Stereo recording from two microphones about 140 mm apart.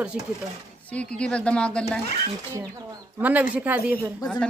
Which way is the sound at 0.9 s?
5° left (ahead or behind).